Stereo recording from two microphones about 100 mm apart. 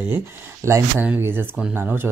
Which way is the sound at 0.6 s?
30° right (ahead or behind).